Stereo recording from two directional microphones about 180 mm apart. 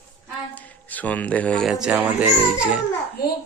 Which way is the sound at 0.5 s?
10° left (ahead or behind).